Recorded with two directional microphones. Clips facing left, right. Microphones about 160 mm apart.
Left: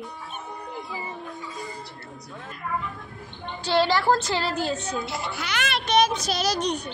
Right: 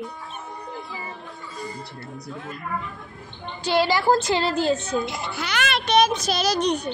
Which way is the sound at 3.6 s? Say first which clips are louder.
Right 1 dB; 15° right (ahead or behind).